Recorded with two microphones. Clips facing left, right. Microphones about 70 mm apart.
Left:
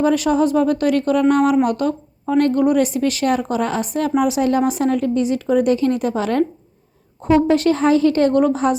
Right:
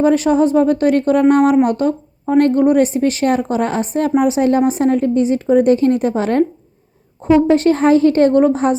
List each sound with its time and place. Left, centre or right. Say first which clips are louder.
0.0 s a woman's voice: right 3 dB; right
2.4 s a woman's voice: right 3 dB; right
7.2 s a woman's voice: right 3 dB; right